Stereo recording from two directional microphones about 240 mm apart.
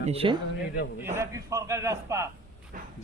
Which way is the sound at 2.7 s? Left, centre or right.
Right.